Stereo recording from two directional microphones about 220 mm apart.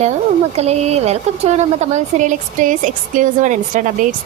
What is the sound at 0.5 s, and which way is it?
A woman's voice, 30° right (ahead or behind).